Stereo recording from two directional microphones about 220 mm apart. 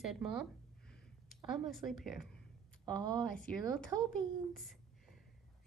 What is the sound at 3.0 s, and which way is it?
A woman's voice, 20° right (ahead or behind).